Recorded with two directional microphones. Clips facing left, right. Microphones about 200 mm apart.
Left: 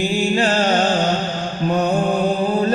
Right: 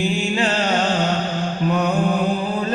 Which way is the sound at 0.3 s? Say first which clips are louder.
Left 4 dB; 40° left (ahead or behind).